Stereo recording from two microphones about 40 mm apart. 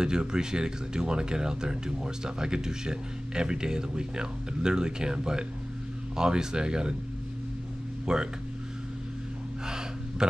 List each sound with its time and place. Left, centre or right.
0.0 s speech: centre
8.1 s speech: centre
9.7 s gasp: centre